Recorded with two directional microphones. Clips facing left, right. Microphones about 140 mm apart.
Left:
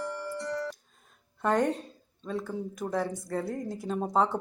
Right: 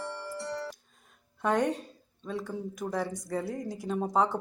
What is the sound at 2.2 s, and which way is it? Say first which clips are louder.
A woman's voice: left 1 dB; centre (ahead or behind).